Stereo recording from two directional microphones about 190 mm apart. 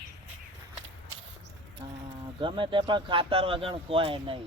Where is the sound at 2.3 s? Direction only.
25° right (ahead or behind).